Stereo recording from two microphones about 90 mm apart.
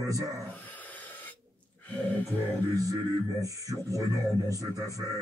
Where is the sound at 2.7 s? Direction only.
40° right (ahead or behind).